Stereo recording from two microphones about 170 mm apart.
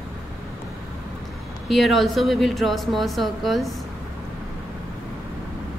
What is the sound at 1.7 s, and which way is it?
A woman's voice, centre (ahead or behind).